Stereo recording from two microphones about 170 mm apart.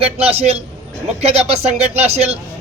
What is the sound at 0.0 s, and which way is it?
Speech, 35° right (ahead or behind).